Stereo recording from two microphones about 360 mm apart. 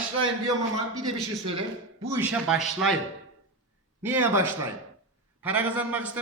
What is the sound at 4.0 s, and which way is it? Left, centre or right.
Speech, centre.